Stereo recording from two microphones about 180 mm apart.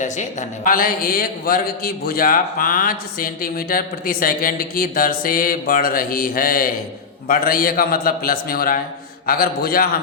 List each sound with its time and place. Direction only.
0.0 s a man's voice: 45° left (ahead or behind)